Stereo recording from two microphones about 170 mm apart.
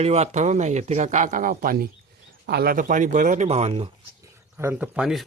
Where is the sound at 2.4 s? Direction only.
70° right (ahead or behind); by 3.9 s 35° right (ahead or behind).